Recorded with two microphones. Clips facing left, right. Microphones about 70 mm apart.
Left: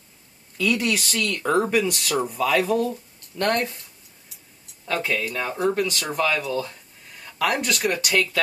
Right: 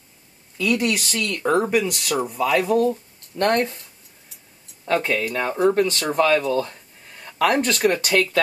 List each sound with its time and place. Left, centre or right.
0.6 s speech: centre
3.3 s speech: right
4.8 s speech: right
6.1 s speech: right